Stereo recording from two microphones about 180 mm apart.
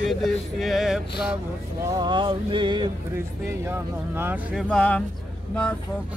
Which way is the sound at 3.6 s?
15° right (ahead or behind).